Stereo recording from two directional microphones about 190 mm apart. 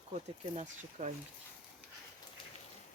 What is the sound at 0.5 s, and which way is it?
Speech, 40° right (ahead or behind).